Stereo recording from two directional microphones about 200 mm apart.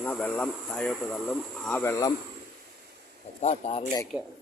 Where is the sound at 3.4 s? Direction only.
30° left (ahead or behind).